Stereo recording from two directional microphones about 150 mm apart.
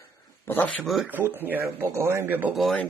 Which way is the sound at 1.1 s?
15° right (ahead or behind).